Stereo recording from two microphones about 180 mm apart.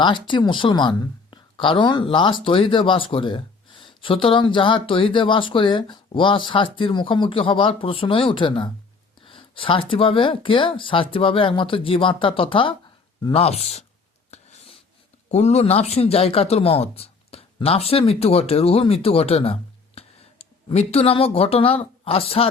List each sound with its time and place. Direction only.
0.0 s speech: 25° left (ahead or behind)
14.3 s writing: 35° left (ahead or behind)
15.3 s speech: 40° left (ahead or behind)